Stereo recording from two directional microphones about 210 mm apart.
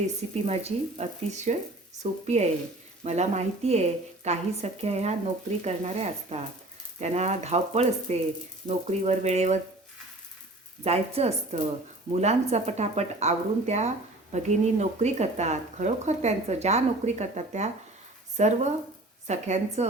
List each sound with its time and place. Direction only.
0.2 s a woman's voice: 30° right (ahead or behind)
10.8 s a woman's voice: 30° right (ahead or behind)